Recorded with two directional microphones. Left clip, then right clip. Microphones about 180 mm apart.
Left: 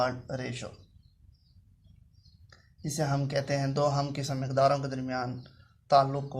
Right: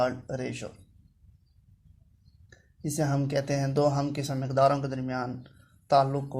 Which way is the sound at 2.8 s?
40° right (ahead or behind).